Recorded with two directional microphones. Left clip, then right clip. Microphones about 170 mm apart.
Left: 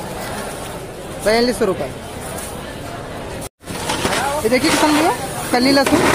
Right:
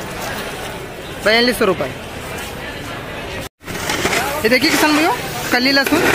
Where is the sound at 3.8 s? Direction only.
90° left.